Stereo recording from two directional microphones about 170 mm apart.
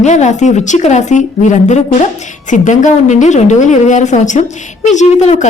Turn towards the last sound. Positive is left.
turn(degrees=45)  # may be behind; listen again after turning